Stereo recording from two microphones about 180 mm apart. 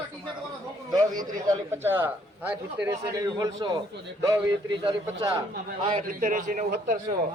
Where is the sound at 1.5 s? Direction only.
15° right (ahead or behind).